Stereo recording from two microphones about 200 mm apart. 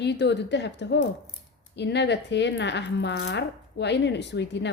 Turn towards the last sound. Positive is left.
turn(degrees=60)  # may be behind; listen again after turning